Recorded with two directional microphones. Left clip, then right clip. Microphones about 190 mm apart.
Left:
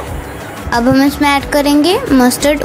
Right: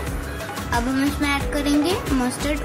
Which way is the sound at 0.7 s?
30° left (ahead or behind).